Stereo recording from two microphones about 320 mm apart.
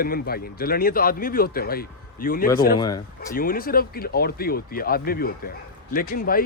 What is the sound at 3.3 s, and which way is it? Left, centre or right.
Speech, left.